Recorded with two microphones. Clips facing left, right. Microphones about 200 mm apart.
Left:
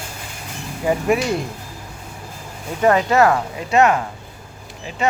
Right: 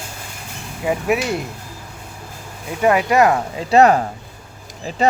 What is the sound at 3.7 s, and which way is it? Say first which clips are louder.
Speech: right 3 dB; 35° right (ahead or behind).